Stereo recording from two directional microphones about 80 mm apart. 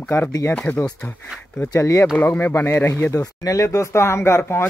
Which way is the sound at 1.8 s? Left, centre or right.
Left.